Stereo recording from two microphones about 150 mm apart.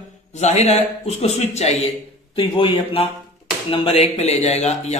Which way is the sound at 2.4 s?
35° left (ahead or behind).